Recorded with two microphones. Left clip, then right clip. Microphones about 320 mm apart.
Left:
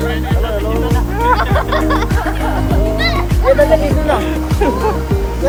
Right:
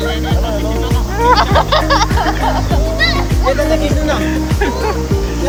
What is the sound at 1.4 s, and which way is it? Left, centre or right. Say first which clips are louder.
Music: right 4 dB; right.